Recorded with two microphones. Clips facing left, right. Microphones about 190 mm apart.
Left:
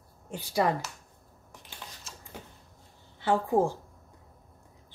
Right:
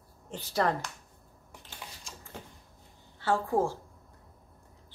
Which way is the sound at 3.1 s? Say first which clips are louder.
Left 2 dB; 15° left (ahead or behind).